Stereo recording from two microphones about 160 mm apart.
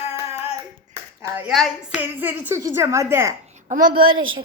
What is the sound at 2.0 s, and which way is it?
A woman's voice, 10° right (ahead or behind).